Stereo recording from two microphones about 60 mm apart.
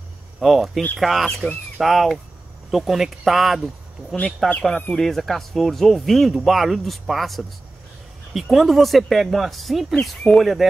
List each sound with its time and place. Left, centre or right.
0.4 s speech: centre
4.6 s speech: centre